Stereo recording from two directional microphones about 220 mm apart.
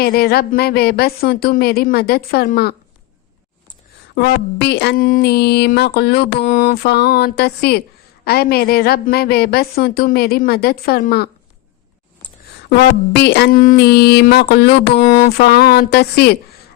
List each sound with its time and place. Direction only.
0.0 s a woman's voice: 45° left (ahead or behind)
4.1 s a woman's voice: 45° left (ahead or behind)
12.7 s a woman's voice: 45° left (ahead or behind)